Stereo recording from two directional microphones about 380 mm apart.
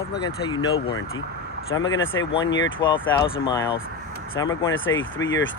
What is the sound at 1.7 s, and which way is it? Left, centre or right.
Speech, left.